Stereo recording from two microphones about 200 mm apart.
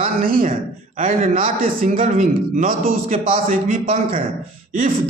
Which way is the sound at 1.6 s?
35° right (ahead or behind).